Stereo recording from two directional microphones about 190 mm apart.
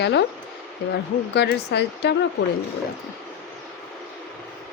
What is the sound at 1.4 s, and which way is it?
Speech, 60° left (ahead or behind).